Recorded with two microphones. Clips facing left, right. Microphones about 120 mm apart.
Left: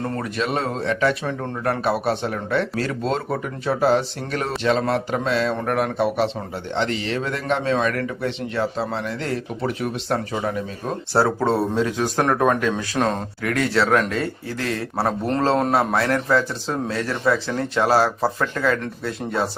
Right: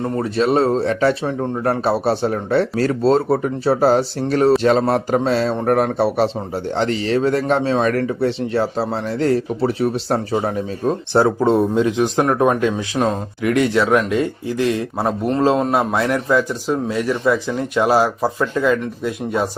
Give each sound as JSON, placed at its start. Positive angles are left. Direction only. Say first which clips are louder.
{"t": 0.2, "sound": "speech", "louder": "right 11 dB", "side_deg": -35}
{"t": 1.2, "sound": "speech", "louder": "right 5 dB", "side_deg": -20}
{"t": 11.1, "sound": "speech", "louder": "right 4 dB", "side_deg": -20}